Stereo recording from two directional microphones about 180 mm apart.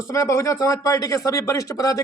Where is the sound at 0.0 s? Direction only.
15° left (ahead or behind).